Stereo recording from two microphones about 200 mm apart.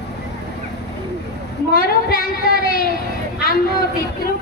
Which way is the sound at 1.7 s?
45° left (ahead or behind).